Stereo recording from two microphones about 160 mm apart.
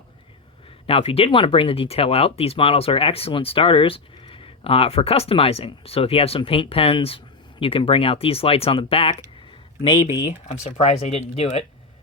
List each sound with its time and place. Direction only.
0.9 s speech: 35° left (ahead or behind)
10.5 s speech: 45° left (ahead or behind)